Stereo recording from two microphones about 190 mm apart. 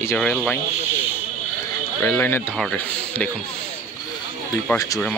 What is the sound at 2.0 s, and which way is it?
Speech, 10° left (ahead or behind).